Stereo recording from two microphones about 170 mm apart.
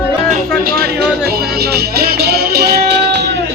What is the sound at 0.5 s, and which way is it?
Music, 60° right (ahead or behind).